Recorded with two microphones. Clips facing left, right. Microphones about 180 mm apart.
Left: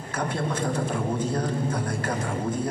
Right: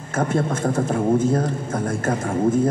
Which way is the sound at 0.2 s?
45° right (ahead or behind).